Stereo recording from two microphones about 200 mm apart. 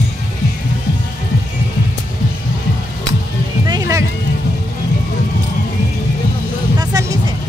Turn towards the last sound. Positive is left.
turn(degrees=-15)  # may be behind; listen again after turning